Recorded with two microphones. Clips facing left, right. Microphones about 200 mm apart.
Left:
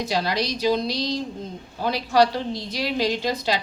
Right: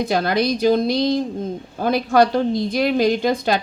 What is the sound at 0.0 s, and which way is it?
Speech, 55° right (ahead or behind).